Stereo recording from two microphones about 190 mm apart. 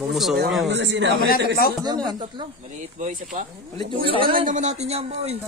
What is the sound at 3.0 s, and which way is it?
Speech, 45° right (ahead or behind).